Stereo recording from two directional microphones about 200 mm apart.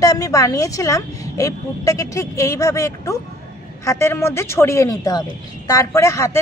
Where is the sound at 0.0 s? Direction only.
15° left (ahead or behind).